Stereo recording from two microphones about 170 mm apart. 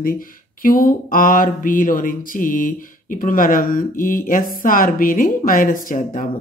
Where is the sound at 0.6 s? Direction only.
55° left (ahead or behind).